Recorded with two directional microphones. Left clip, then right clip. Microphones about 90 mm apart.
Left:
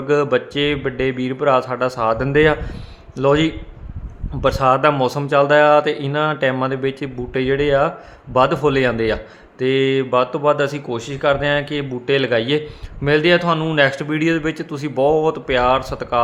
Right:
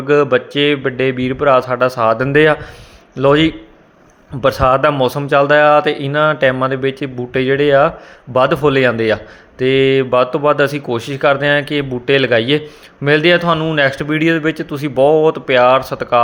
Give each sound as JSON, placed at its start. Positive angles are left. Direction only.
{"t": 0.0, "sound": "speech", "side_deg": -25}